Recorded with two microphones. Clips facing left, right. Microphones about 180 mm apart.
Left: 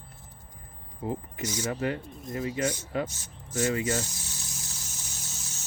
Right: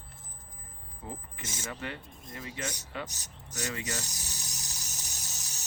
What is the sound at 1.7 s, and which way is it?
Speech, 40° left (ahead or behind).